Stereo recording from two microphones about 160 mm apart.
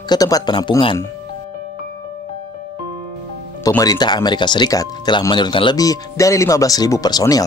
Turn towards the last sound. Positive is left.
turn(degrees=25)  # may be behind; listen again after turning